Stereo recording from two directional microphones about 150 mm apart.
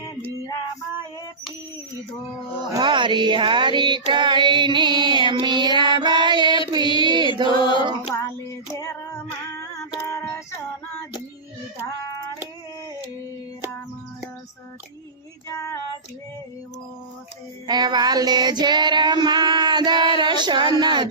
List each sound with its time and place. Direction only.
2.6 s child singing: 30° right (ahead or behind)
6.9 s mantra: 30° right (ahead or behind)
7.6 s female singing: 30° left (ahead or behind)
15.4 s female singing: 20° left (ahead or behind)
17.7 s female singing: 30° right (ahead or behind)
20.1 s a sound: 30° right (ahead or behind)